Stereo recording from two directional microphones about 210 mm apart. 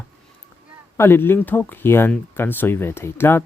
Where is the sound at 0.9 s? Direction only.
10° left (ahead or behind).